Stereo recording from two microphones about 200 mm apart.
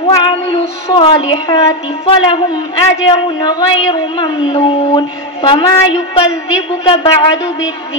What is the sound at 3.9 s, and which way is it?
Child singing, 25° left (ahead or behind).